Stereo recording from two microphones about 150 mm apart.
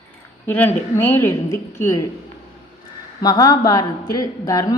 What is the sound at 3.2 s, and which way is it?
A woman's voice, 25° left (ahead or behind).